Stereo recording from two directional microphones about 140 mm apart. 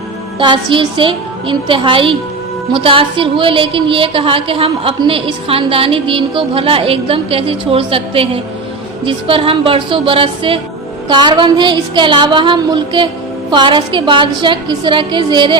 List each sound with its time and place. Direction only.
0.3 s a woman's voice: 35° right (ahead or behind)